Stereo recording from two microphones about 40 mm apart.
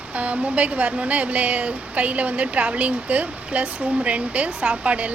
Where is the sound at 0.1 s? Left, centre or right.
Right.